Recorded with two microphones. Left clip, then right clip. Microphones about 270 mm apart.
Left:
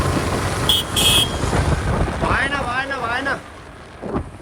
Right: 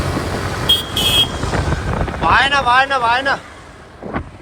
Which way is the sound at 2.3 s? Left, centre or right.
Centre.